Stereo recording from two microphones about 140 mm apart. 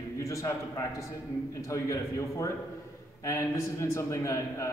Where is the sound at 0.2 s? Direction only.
20° left (ahead or behind).